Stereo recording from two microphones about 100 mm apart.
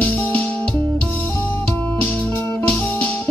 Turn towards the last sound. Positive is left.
turn(degrees=15)  # may be behind; listen again after turning